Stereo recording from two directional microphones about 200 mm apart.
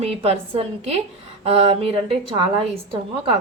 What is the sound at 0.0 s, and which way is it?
A woman's voice, 30° right (ahead or behind).